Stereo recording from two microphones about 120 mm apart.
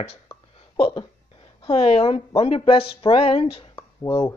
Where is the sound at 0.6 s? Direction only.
50° left (ahead or behind).